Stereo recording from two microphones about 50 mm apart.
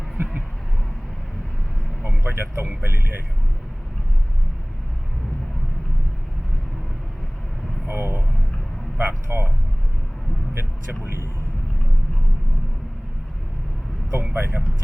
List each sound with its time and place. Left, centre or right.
2.0 s speech: right
7.9 s speech: right
10.5 s speech: right
14.1 s speech: right